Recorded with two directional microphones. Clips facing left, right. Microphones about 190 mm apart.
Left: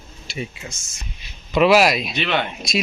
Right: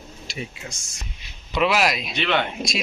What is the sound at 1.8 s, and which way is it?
Speech, 10° left (ahead or behind).